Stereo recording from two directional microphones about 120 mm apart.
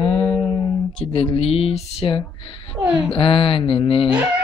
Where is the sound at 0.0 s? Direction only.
40° left (ahead or behind).